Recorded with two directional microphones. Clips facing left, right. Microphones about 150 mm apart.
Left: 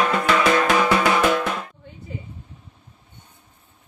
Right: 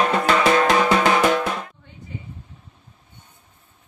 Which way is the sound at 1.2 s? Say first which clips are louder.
Right 1 dB; 5° right (ahead or behind).